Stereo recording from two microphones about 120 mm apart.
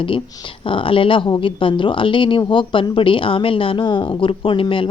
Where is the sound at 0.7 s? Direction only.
50° left (ahead or behind).